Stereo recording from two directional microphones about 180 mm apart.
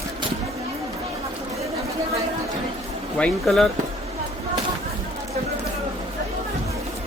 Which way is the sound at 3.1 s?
5° left (ahead or behind).